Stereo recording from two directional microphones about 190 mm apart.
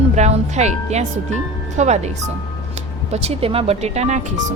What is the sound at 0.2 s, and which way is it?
Speech, 35° right (ahead or behind).